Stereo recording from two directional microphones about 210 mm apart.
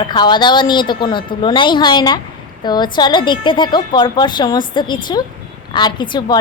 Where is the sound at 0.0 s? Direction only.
20° left (ahead or behind).